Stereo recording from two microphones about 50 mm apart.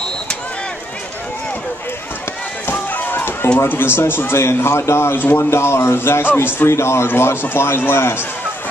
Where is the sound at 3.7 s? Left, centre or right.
Left.